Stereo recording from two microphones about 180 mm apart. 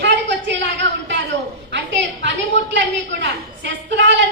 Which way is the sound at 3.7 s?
85° right.